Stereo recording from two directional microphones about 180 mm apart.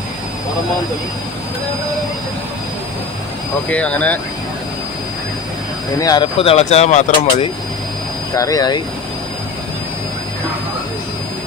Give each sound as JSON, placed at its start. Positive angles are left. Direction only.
{"t": 3.7, "sound": "speech", "side_deg": 5}
{"t": 5.9, "sound": "speech", "side_deg": 20}
{"t": 6.4, "sound": "speech", "side_deg": 35}
{"t": 8.4, "sound": "speech", "side_deg": 20}